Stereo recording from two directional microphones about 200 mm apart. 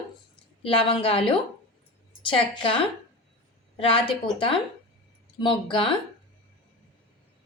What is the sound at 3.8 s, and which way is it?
A woman's voice, 25° left (ahead or behind).